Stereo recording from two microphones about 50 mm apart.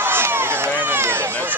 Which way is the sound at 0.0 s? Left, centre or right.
Right.